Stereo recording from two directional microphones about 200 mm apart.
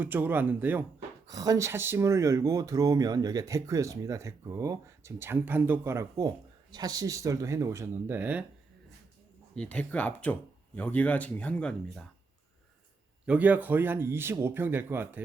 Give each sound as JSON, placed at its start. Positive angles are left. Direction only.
{"t": 0.0, "sound": "speech", "side_deg": -10}
{"t": 9.6, "sound": "speech", "side_deg": 5}
{"t": 13.2, "sound": "speech", "side_deg": -5}